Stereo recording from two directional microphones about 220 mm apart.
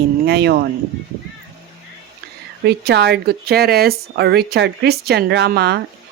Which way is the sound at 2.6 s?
50° right (ahead or behind).